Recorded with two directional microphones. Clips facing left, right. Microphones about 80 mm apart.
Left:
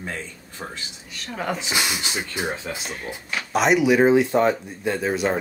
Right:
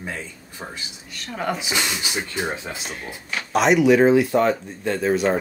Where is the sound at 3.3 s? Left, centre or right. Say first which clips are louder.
Right 1 dB; centre.